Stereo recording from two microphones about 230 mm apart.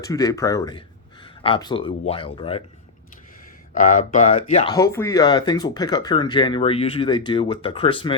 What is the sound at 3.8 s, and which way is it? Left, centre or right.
Speech, left.